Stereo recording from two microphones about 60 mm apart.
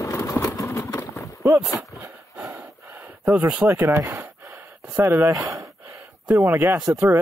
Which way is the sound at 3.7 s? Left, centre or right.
Right.